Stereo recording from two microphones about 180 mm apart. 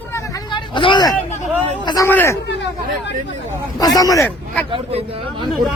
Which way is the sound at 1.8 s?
15° left (ahead or behind).